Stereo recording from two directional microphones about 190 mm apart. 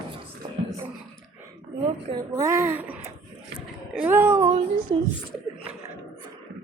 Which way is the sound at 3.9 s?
10° right (ahead or behind).